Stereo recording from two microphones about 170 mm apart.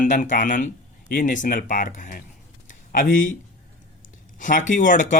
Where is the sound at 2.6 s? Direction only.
50° left (ahead or behind).